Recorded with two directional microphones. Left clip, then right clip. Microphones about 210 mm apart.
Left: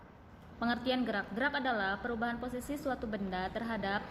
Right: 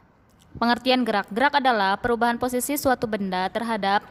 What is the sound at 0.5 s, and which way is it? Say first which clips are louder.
A woman's voice: right 12 dB; 50° right (ahead or behind).